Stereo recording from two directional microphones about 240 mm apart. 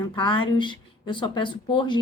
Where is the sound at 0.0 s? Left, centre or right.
Centre.